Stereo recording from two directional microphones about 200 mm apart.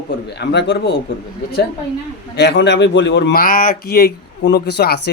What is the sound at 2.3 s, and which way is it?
Speech, 60° left (ahead or behind).